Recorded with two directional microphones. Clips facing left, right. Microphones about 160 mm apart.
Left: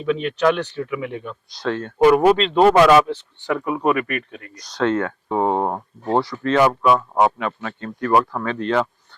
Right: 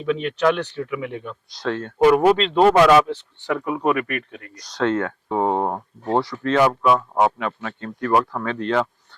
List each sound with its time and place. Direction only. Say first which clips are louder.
0.0 s speech: left 1 dB; 10° left (ahead or behind)
3.6 s speech: left 1 dB; 25° left (ahead or behind)
3.8 s speech: left 1 dB; 15° left (ahead or behind)
6.3 s speech: left 1 dB; 10° left (ahead or behind)